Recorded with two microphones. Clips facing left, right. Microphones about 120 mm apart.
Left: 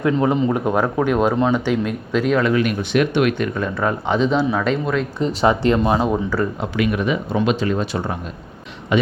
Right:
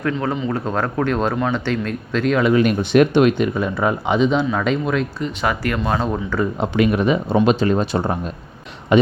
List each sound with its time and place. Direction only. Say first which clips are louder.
0.0 s speech: left 4 dB; 15° left (ahead or behind)
2.6 s speech: right 4 dB; 40° right (ahead or behind)
3.3 s speech: right 2 dB; 15° right (ahead or behind)
5.2 s speech: left 5 dB; 25° left (ahead or behind); by 6.4 s 10° left (ahead or behind)
6.6 s speech: right 3 dB; 35° right (ahead or behind)